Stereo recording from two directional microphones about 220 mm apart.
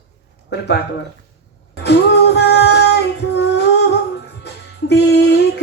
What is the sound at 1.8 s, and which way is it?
Music, 50° left (ahead or behind).